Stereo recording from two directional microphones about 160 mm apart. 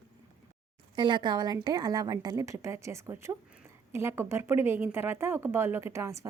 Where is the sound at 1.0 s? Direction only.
30° right (ahead or behind).